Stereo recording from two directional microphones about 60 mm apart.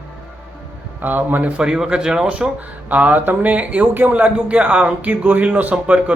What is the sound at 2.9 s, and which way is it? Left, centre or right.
Speech, right.